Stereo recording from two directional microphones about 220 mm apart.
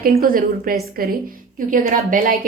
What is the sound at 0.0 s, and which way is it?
Speech, 40° right (ahead or behind).